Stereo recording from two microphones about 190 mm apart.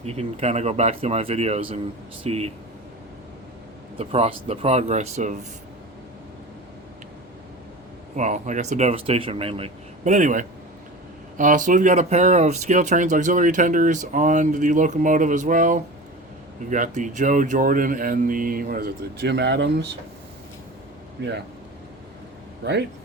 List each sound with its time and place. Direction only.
0.0 s speech: 35° right (ahead or behind)
3.9 s speech: 35° right (ahead or behind)
8.1 s speech: 40° right (ahead or behind); by 19.9 s 65° right (ahead or behind)
21.2 s speech: 65° right (ahead or behind)